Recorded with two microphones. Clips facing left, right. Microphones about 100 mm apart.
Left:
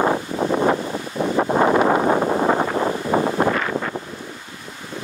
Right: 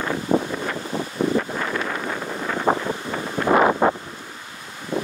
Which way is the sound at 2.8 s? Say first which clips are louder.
Left 7 dB; 65° left (ahead or behind).